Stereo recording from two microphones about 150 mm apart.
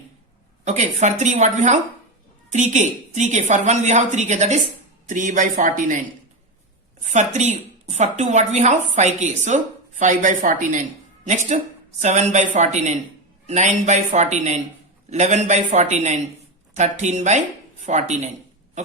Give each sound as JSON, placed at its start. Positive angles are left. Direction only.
{"t": 0.6, "sound": "a woman's voice", "side_deg": -50}